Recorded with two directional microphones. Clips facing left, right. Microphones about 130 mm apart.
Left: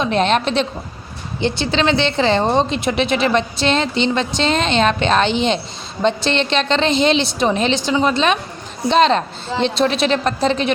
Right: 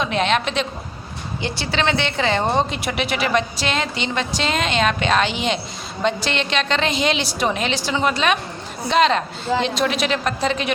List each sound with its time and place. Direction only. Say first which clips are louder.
0.0 s a woman's voice: left 3 dB; 35° left (ahead or behind)
1.4 s a woman's voice: left 5 dB; 25° left (ahead or behind)